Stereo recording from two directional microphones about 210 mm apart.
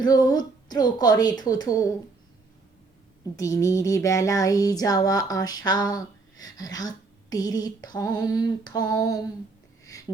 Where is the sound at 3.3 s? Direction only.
15° left (ahead or behind).